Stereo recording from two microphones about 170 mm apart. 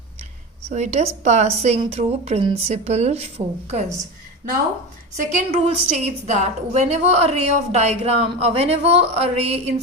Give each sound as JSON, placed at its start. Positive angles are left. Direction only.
{"t": 0.7, "sound": "a woman's voice", "side_deg": -40}
{"t": 5.3, "sound": "a woman's voice", "side_deg": -40}